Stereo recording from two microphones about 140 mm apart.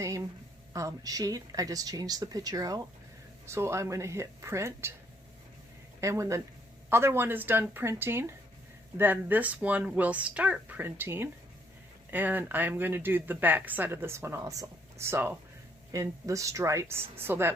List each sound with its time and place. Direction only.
0.7 s a woman's voice: 25° right (ahead or behind)
6.0 s a woman's voice: 20° right (ahead or behind)